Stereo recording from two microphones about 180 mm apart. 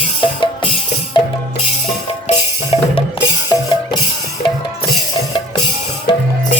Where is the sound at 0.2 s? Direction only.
30° left (ahead or behind).